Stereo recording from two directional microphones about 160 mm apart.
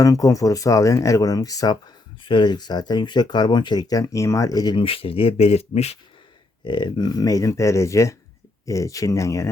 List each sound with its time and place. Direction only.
0.0 s speech: 20° left (ahead or behind); by 6.0 s 40° left (ahead or behind)
6.7 s speech: 30° left (ahead or behind)